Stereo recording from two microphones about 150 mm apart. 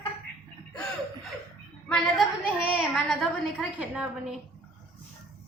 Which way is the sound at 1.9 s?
Centre (ahead or behind).